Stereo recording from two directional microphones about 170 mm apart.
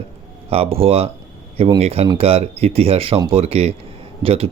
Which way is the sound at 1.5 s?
25° right (ahead or behind).